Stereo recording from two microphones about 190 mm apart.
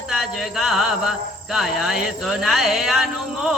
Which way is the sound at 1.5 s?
Centre (ahead or behind).